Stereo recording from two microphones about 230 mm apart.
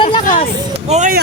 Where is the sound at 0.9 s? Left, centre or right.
Right.